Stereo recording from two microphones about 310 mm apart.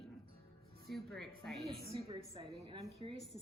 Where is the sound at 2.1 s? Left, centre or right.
Centre.